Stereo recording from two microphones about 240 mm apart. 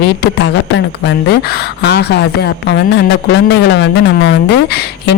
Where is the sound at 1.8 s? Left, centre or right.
Left.